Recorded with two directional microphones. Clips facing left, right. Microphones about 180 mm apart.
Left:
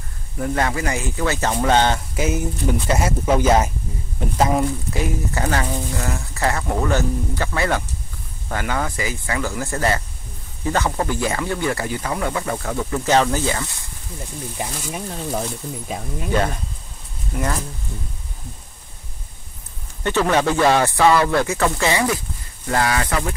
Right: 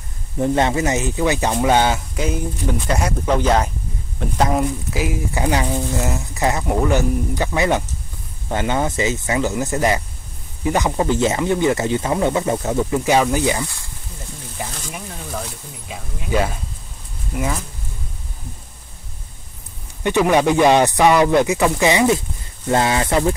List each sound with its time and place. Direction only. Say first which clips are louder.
0.4 s speech: right 5 dB; 25° right (ahead or behind)
2.1 s speech: left 1 dB; 5° left (ahead or behind)
4.6 s speech: right 1 dB; 15° right (ahead or behind)
14.6 s speech: left 1 dB; 25° left (ahead or behind)
16.3 s speech: right 1 dB; 5° right (ahead or behind)
20.0 s speech: right 3 dB; 15° right (ahead or behind)